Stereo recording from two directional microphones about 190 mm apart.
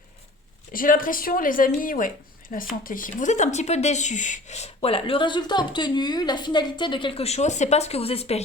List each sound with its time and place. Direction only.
0.7 s speech: 45° left (ahead or behind); by 8.4 s 30° left (ahead or behind)